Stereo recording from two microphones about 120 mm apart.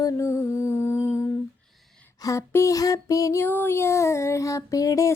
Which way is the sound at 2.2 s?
25° left (ahead or behind).